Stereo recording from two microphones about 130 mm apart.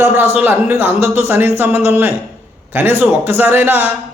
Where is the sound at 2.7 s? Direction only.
15° right (ahead or behind).